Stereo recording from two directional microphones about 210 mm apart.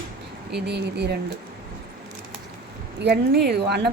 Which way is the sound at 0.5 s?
50° right (ahead or behind).